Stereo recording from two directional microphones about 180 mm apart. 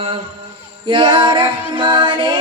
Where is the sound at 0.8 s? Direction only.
25° right (ahead or behind).